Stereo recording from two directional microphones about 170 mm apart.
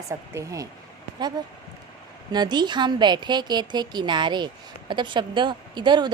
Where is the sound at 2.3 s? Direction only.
25° right (ahead or behind).